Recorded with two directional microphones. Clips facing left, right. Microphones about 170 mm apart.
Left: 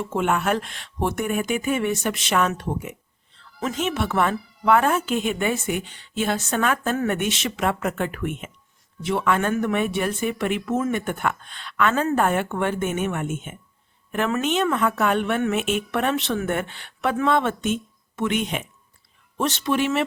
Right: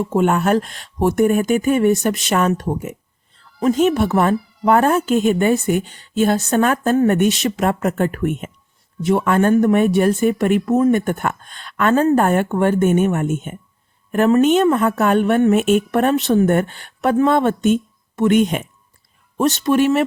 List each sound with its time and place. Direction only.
0.0 s a woman's voice: 40° right (ahead or behind)